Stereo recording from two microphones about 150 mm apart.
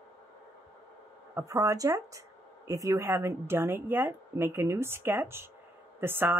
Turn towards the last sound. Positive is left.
turn(degrees=-15)  # may be behind; listen again after turning